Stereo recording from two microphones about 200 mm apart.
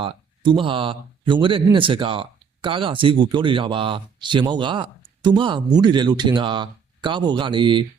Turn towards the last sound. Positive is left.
turn(degrees=-25)  # may be behind; listen again after turning